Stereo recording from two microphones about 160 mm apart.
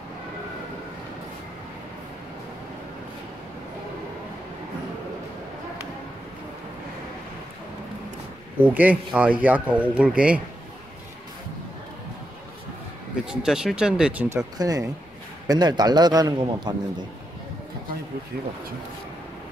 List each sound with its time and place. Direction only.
8.5 s speech: 10° right (ahead or behind)
13.3 s speech: 5° right (ahead or behind)
14.3 s a man's voice: 20° right (ahead or behind)